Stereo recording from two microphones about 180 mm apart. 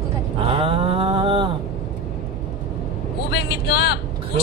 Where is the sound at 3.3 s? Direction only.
65° left (ahead or behind).